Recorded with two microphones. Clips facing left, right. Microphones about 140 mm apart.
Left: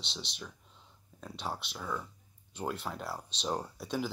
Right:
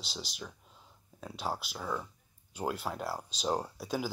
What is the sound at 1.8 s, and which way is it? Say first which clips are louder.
Speech: even; 20° right (ahead or behind).